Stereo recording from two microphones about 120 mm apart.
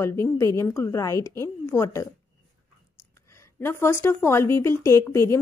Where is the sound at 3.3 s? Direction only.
20° left (ahead or behind).